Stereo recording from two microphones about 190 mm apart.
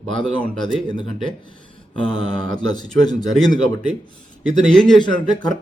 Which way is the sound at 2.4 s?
20° left (ahead or behind).